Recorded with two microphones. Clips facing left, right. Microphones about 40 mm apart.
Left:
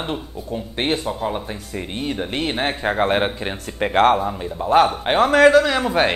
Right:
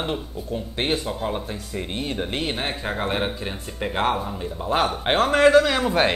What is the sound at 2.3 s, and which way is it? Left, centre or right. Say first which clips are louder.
Speech: left 4 dB; left.